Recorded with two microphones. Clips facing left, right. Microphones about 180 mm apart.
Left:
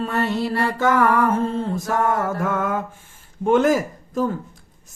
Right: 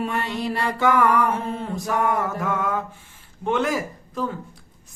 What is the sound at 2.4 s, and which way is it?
Speech, 50° left (ahead or behind).